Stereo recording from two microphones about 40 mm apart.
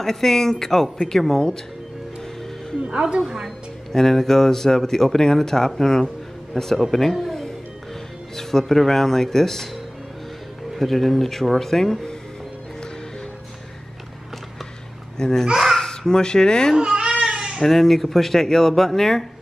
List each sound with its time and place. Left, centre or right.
0.0 s speech: centre
2.8 s a woman's voice: right
3.9 s speech: centre
10.8 s speech: centre
15.1 s speech: centre
15.5 s a sound: centre
15.8 s speech: centre
16.8 s goat: right
17.6 s speech: centre